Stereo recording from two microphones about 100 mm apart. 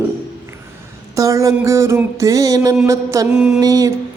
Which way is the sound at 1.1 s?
35° right (ahead or behind).